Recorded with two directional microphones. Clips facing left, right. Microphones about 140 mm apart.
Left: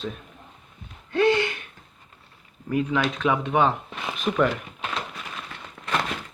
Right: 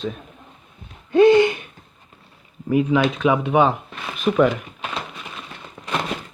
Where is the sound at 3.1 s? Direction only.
5° right (ahead or behind).